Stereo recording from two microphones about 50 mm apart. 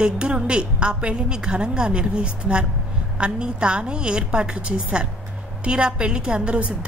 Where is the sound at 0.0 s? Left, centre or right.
Centre.